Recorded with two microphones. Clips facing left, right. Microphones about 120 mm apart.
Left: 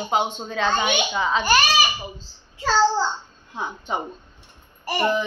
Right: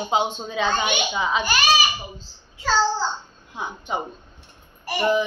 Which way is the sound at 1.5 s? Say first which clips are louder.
Left 1 dB; 45° left (ahead or behind).